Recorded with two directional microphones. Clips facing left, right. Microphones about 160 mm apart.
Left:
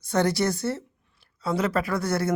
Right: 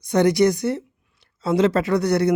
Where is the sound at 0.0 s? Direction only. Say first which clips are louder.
Right 7 dB; 15° right (ahead or behind).